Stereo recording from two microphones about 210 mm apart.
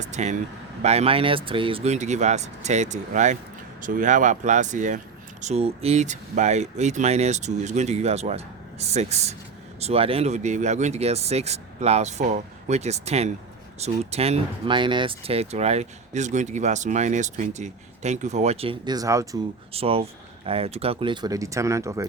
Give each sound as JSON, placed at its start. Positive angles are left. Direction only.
{"t": 0.0, "sound": "speech", "side_deg": -35}
{"t": 19.7, "sound": "speech", "side_deg": -25}